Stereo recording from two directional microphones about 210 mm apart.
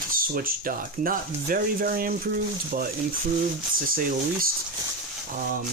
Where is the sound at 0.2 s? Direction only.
45° right (ahead or behind).